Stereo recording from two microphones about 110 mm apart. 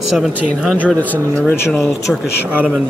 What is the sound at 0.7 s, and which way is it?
Speech, 15° left (ahead or behind).